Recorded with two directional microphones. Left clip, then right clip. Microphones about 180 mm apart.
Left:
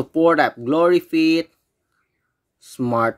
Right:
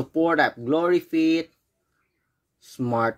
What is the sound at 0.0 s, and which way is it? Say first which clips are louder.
Speech: left 5 dB; 25° left (ahead or behind).